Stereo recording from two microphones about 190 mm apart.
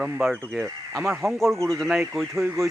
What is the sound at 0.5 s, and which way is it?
Speech, 15° right (ahead or behind).